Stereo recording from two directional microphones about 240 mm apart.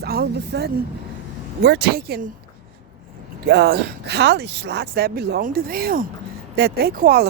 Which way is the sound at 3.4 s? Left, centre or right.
Right.